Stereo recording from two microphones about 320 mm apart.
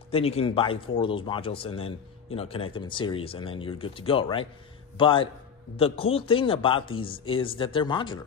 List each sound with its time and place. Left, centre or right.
0.1 s speech: centre